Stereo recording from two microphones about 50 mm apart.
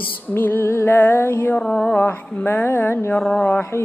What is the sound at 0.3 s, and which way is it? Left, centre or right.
Music, left.